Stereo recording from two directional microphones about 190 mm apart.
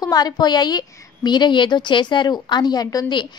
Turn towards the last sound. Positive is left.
turn(degrees=25)  # may be behind; listen again after turning